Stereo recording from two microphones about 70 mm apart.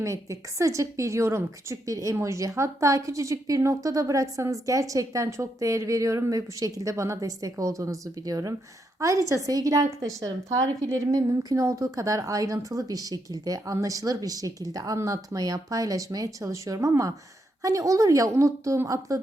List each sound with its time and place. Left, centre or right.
0.0 s a woman's voice: right